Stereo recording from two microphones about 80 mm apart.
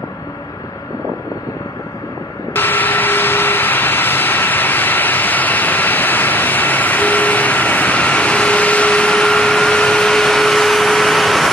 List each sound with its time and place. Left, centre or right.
2.5 s vehicle: left; by 11.4 s centre